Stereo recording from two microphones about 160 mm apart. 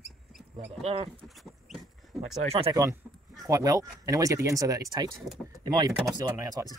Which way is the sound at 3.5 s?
20° right (ahead or behind).